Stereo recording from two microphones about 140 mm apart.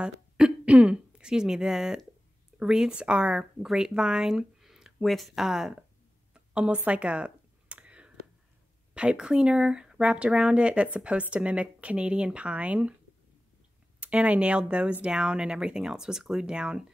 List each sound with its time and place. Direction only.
0.0 s speech: 10° right (ahead or behind)
6.3 s a sound: 10° right (ahead or behind)
8.9 s speech: 10° right (ahead or behind)
14.0 s speech: 10° right (ahead or behind)